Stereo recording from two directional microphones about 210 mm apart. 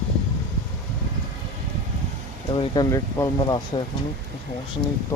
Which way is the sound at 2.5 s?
20° left (ahead or behind).